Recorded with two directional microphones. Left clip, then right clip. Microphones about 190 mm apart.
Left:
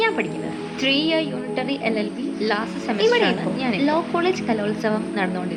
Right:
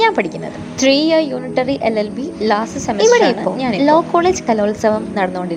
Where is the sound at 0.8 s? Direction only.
25° right (ahead or behind).